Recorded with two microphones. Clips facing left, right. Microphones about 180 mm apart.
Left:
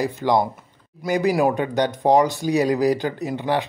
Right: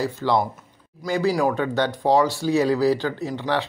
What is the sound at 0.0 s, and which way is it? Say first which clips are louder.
Speech: left 2 dB; 15° left (ahead or behind).